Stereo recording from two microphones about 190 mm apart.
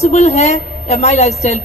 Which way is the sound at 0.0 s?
35° left (ahead or behind).